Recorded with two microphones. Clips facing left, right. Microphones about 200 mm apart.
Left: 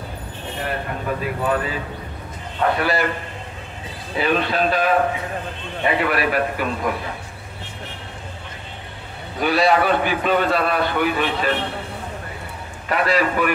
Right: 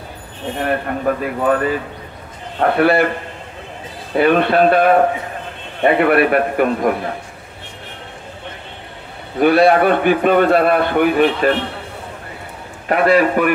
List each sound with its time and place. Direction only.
0.6 s a man's voice: 55° right (ahead or behind)
4.1 s a man's voice: 55° right (ahead or behind)
9.4 s a man's voice: 55° right (ahead or behind)
12.8 s a man's voice: 55° right (ahead or behind)